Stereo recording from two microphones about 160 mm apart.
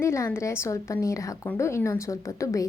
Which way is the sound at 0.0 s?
15° left (ahead or behind).